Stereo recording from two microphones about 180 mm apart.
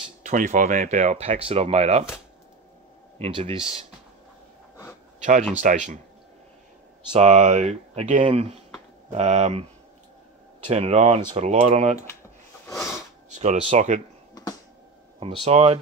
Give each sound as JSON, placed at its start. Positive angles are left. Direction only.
{"t": 0.2, "sound": "speech", "side_deg": -45}
{"t": 3.2, "sound": "speech", "side_deg": -30}
{"t": 5.2, "sound": "speech", "side_deg": -45}
{"t": 7.2, "sound": "speech", "side_deg": -40}
{"t": 13.3, "sound": "speech", "side_deg": -40}
{"t": 15.1, "sound": "speech", "side_deg": -30}